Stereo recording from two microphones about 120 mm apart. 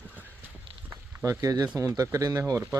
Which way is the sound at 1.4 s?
30° right (ahead or behind).